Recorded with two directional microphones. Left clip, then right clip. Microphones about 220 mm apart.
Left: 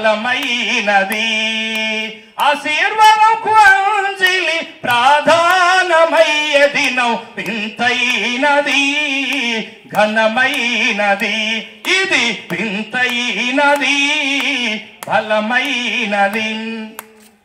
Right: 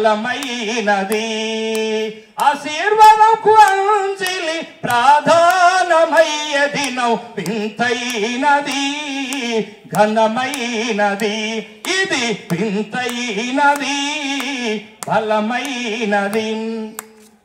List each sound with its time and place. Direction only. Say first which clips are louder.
0.0 s mantra: left 2 dB; 55° right (ahead or behind)
4.2 s singing: left 6 dB; 60° right (ahead or behind)
14.5 s mantra: left 4 dB; 55° right (ahead or behind)